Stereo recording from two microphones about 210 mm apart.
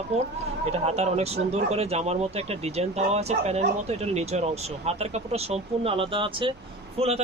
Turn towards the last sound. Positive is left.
turn(degrees=-30)  # may be behind; listen again after turning